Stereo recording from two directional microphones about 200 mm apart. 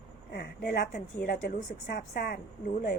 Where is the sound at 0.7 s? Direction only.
45° left (ahead or behind).